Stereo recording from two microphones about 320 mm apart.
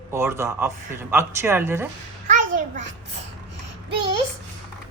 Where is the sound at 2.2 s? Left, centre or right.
Right.